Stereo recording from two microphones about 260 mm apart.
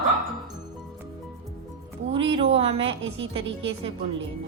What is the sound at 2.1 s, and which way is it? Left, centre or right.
Speech, centre.